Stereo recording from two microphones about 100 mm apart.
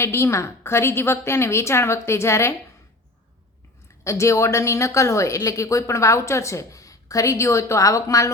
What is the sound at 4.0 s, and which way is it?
A woman's voice, 30° left (ahead or behind).